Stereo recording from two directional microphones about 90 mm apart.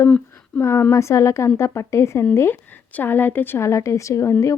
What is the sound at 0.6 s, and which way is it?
A woman's voice, 30° left (ahead or behind).